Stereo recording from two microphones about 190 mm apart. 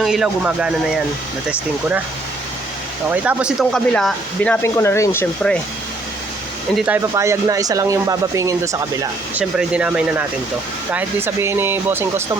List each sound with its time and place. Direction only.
0.0 s speech: 5° right (ahead or behind)
3.1 s speech: 5° right (ahead or behind)
6.7 s speech: 10° right (ahead or behind)
9.3 s speech: 5° right (ahead or behind)